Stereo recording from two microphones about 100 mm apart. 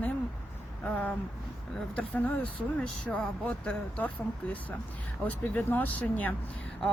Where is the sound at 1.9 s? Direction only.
15° left (ahead or behind).